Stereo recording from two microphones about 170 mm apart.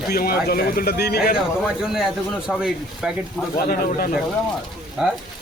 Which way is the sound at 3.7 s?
55° left (ahead or behind).